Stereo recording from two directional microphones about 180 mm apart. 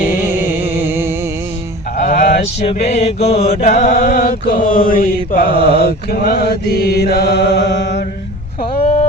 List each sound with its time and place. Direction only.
0.3 s music: 10° right (ahead or behind)
2.0 s mantra: 50° left (ahead or behind)
2.4 s mantra: 35° left (ahead or behind); by 8.0 s 75° left (ahead or behind)
8.7 s a sound: 35° left (ahead or behind)